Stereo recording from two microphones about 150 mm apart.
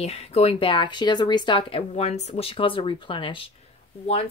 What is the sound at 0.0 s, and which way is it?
Speech, 45° left (ahead or behind).